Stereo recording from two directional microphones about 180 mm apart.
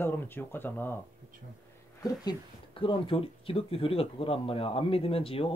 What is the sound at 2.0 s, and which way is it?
Speech, 25° left (ahead or behind).